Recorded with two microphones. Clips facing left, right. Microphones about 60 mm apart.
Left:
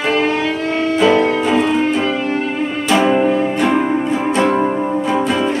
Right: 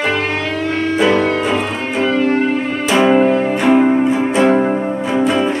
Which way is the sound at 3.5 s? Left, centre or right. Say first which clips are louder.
Right 3 dB; centre.